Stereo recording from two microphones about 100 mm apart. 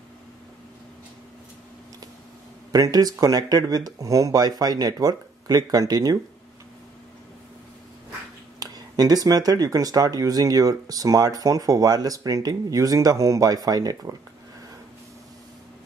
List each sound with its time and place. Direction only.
2.7 s speech: 40° right (ahead or behind)
8.5 s speech: 40° right (ahead or behind)